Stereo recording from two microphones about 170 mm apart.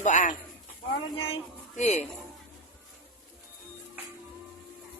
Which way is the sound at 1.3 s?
45° left (ahead or behind).